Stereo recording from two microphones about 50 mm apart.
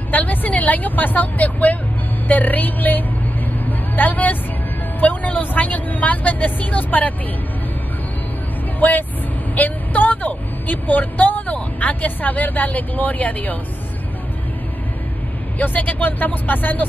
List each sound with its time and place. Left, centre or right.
0.1 s speech: left
3.6 s vehicle: left
5.0 s speech: left
8.7 s speech: left
15.6 s speech: left